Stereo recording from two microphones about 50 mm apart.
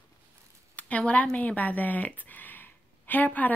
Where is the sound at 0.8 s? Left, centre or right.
Left.